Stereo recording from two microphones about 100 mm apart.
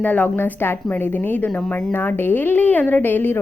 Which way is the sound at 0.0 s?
15° left (ahead or behind).